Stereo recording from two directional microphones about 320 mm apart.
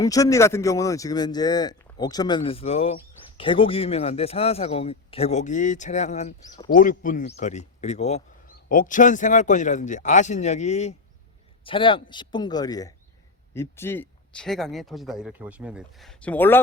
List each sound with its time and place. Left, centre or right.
0.0 s speech: centre